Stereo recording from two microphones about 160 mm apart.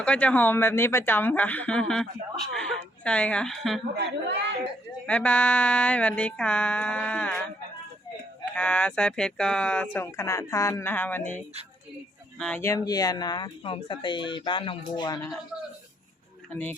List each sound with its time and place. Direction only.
0.0 s speech: 10° left (ahead or behind)
3.9 s a woman's voice: 90° right
5.0 s speech: 5° left (ahead or behind)
8.5 s speech: 5° left (ahead or behind)
12.4 s speech: 10° left (ahead or behind); by 15.2 s 25° left (ahead or behind)
16.5 s speech: 10° left (ahead or behind)